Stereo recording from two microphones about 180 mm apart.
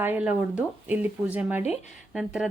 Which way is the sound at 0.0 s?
10° right (ahead or behind).